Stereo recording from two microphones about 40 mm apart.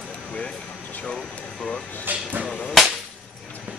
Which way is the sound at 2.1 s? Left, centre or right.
Right.